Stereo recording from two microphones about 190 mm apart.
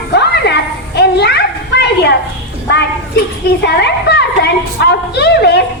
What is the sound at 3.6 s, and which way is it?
A woman's voice, 60° left (ahead or behind).